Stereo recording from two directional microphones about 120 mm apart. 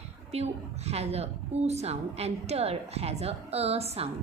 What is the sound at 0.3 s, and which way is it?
A woman's voice, 60° right (ahead or behind).